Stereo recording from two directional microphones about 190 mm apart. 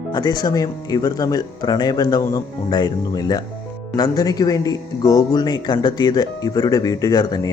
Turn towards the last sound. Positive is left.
turn(degrees=20)  # may be behind; listen again after turning